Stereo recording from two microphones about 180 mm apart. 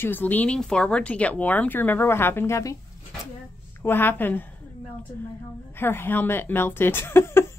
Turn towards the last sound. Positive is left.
turn(degrees=15)  # may be behind; listen again after turning